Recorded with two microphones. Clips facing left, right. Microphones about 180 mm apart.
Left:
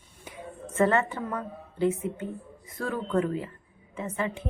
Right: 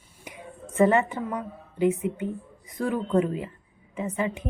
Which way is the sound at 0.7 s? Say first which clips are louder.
Right 3 dB; 15° right (ahead or behind).